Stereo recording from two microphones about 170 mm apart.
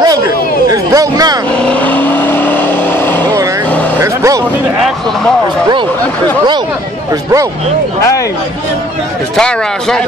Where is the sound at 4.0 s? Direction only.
20° right (ahead or behind).